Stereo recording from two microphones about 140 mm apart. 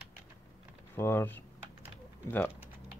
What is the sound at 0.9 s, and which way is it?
Speech, 15° left (ahead or behind).